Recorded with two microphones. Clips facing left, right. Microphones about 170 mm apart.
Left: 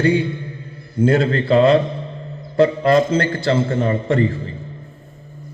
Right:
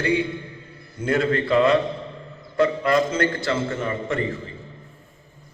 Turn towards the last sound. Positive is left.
turn(degrees=35)  # may be behind; listen again after turning